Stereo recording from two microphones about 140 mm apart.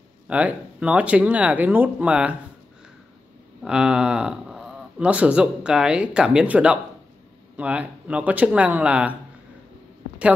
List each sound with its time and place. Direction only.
0.3 s speech: 10° right (ahead or behind)
3.6 s speech: 5° right (ahead or behind)